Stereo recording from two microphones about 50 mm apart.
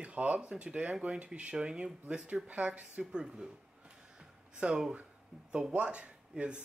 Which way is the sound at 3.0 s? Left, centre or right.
Centre.